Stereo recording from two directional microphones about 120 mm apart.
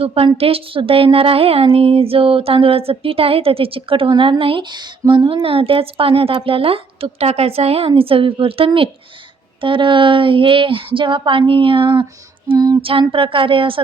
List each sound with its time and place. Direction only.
0.0 s speech: 50° right (ahead or behind)
12.5 s female singing: 30° right (ahead or behind)
12.8 s speech: 50° right (ahead or behind)